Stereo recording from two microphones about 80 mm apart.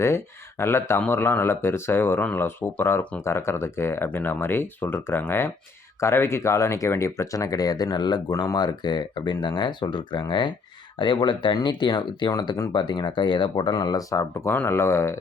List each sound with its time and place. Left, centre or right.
0.6 s speech: left
8.3 s speech: left
11.0 s speech: left
12.3 s speech: left
12.7 s speech: left
14.2 s speech: left